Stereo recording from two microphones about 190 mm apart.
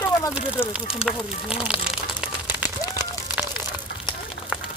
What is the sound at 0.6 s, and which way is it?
Speech, 10° left (ahead or behind).